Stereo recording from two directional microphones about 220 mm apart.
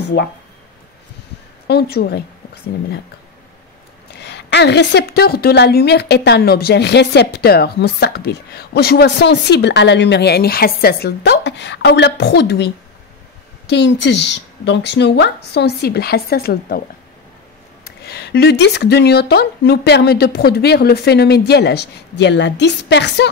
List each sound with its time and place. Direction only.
1.7 s a woman's voice: 45° left (ahead or behind)
4.1 s a woman's voice: 50° left (ahead or behind)
17.8 s a woman's voice: 45° left (ahead or behind)